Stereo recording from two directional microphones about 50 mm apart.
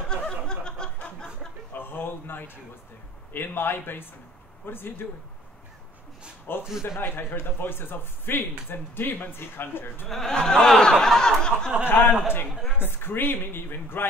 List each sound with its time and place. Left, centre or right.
0.1 s snicker: centre
1.7 s a sound: left
3.3 s speech: left
6.5 s speech: left
10.0 s speech: centre
11.9 s speech: left